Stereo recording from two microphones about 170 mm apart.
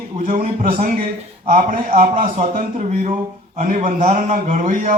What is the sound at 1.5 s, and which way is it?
A man's voice, 50° right (ahead or behind).